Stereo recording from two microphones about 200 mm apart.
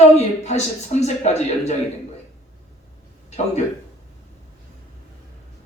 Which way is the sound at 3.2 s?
35° left (ahead or behind).